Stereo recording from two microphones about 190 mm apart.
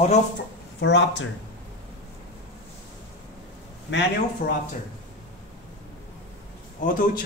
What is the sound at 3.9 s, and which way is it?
Speech, 70° left (ahead or behind).